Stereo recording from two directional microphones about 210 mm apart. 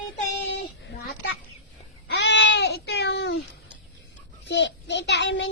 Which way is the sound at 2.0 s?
55° left (ahead or behind).